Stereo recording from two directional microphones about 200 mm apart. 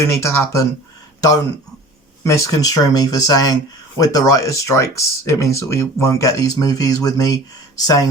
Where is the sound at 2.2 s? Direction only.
15° left (ahead or behind).